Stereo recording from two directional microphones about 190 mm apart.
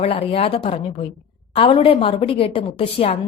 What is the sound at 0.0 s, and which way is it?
A woman's voice, 30° left (ahead or behind).